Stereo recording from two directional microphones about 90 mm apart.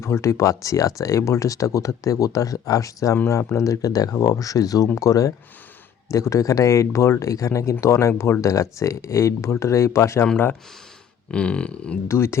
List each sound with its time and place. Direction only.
0.0 s speech: 30° left (ahead or behind)
11.3 s a sound: 10° left (ahead or behind)
12.0 s speech: 30° left (ahead or behind)